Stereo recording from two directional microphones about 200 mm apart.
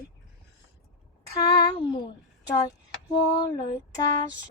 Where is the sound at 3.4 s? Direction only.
20° left (ahead or behind).